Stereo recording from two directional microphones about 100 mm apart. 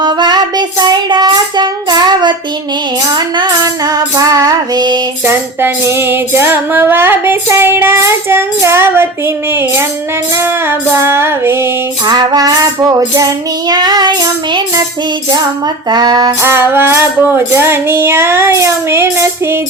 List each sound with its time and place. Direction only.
0.0 s child singing: 45° right (ahead or behind)
3.1 s music: 50° right (ahead or behind)
5.2 s music: 20° right (ahead or behind)
12.0 s child singing: 45° right (ahead or behind)
15.9 s child singing: 45° right (ahead or behind)
16.4 s music: 25° right (ahead or behind)